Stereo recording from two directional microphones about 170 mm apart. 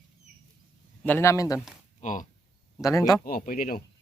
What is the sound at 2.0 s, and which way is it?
Speech, 50° left (ahead or behind).